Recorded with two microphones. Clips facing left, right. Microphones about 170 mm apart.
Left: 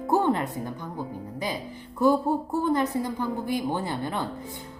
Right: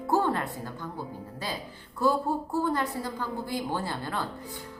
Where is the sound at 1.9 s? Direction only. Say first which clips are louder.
Left 4 dB; 15° left (ahead or behind).